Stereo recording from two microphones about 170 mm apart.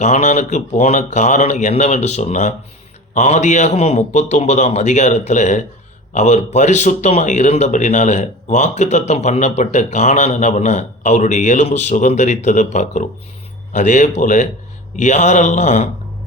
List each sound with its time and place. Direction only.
0.0 s speech: 45° left (ahead or behind)